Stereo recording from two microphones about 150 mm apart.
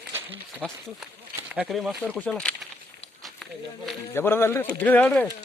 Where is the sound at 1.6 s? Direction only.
5° right (ahead or behind).